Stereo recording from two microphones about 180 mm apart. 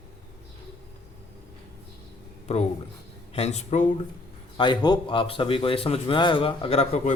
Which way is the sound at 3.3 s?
35° left (ahead or behind).